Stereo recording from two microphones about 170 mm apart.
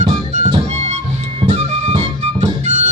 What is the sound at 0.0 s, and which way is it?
Music, 40° right (ahead or behind).